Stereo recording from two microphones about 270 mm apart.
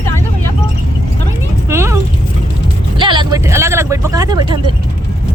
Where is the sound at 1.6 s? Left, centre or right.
Centre.